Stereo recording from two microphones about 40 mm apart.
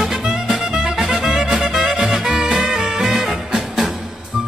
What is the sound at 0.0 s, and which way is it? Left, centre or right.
Music, centre.